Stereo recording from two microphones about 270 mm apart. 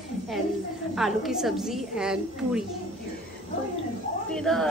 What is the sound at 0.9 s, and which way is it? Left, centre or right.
A woman's voice, centre.